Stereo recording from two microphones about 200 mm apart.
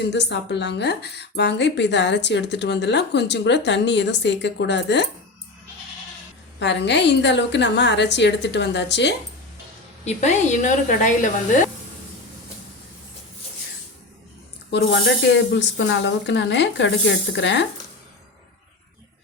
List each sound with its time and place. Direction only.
0.0 s a woman's voice: 60° left (ahead or behind)
6.6 s a woman's voice: 60° left (ahead or behind)
10.0 s speech: 35° left (ahead or behind)
14.7 s a woman's voice: 55° left (ahead or behind)